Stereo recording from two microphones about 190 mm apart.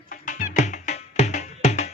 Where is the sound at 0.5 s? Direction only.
40° left (ahead or behind).